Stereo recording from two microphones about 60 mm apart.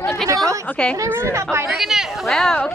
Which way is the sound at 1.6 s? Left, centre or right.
Centre.